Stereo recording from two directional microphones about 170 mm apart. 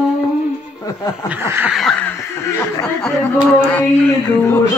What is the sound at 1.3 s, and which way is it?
Snicker, 10° right (ahead or behind).